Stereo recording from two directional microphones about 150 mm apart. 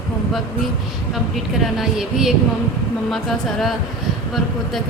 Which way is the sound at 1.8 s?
Centre (ahead or behind).